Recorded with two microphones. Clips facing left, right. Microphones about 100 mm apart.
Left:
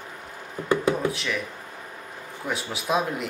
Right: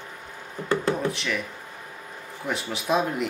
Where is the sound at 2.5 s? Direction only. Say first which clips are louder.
Right 1 dB; centre (ahead or behind).